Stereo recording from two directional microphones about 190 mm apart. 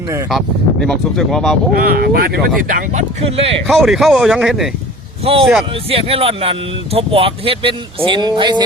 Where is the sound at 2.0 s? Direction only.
55° right (ahead or behind).